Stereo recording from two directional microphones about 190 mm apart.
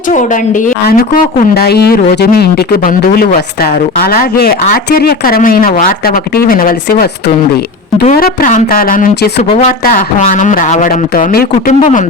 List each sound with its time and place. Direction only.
0.1 s a woman's voice: 40° left (ahead or behind)
9.5 s a woman's voice: 35° left (ahead or behind)